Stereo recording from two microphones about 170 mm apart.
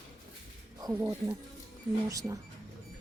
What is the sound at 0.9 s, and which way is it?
Speech, 10° right (ahead or behind).